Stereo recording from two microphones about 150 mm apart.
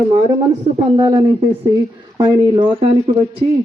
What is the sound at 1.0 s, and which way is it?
A man's voice, 25° right (ahead or behind).